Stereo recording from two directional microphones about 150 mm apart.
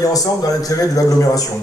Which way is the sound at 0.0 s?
25° left (ahead or behind).